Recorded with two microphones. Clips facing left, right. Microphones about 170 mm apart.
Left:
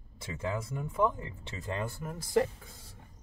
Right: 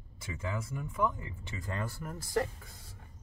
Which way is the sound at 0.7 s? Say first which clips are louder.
Left 3 dB; 30° left (ahead or behind).